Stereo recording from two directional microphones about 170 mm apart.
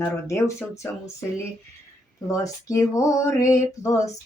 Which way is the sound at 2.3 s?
20° left (ahead or behind).